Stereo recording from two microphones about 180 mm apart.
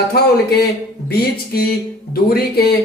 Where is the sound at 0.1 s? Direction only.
60° left (ahead or behind).